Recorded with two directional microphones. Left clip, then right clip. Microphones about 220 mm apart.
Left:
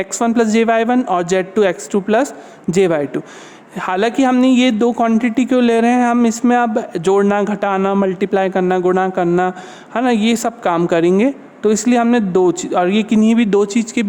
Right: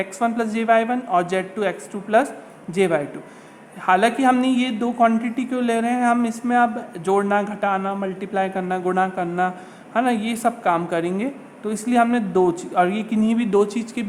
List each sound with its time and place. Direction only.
0.0 s speech: 45° left (ahead or behind)